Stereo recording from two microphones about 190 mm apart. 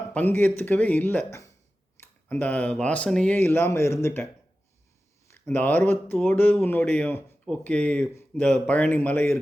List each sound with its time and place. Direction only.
0.1 s speech: 10° left (ahead or behind)
1.3 s a sound: 15° left (ahead or behind)
2.0 s speech: 10° left (ahead or behind)
5.3 s speech: 10° left (ahead or behind)